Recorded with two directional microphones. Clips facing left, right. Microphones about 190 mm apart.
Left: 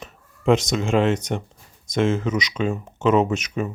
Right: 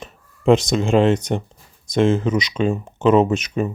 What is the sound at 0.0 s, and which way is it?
Speech, 30° right (ahead or behind).